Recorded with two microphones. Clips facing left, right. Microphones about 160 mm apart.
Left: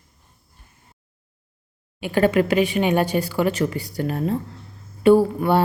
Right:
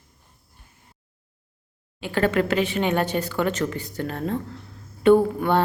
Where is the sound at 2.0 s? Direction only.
15° left (ahead or behind).